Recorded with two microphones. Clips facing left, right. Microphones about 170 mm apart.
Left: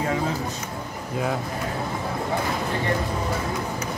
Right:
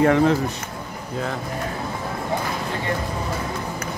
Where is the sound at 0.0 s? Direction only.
65° right (ahead or behind).